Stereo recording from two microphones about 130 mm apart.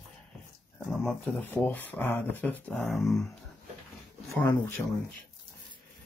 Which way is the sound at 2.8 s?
Centre (ahead or behind).